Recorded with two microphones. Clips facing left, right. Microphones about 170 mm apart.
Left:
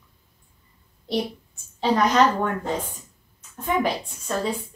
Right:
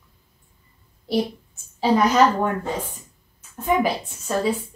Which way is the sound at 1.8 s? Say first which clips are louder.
Right 2 dB; 5° right (ahead or behind).